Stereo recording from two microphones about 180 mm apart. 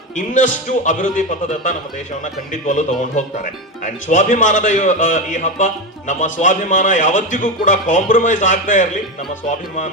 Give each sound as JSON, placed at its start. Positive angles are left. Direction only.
{"t": 0.2, "sound": "speech", "side_deg": 45}